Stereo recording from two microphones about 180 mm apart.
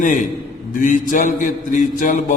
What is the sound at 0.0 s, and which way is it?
A man's voice, 45° left (ahead or behind).